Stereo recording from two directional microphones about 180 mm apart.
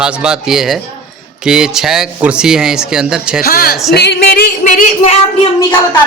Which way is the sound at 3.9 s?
65° left (ahead or behind).